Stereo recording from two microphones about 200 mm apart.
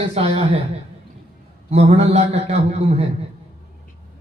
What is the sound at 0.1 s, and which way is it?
Speech, 30° right (ahead or behind).